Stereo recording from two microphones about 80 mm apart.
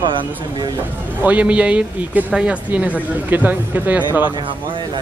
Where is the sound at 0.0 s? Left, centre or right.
Right.